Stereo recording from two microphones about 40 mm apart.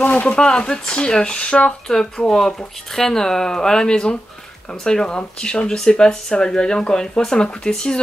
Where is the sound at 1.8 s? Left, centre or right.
Centre.